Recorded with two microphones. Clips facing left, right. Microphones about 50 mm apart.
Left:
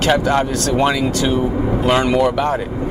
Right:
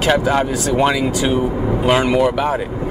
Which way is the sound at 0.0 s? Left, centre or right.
Centre.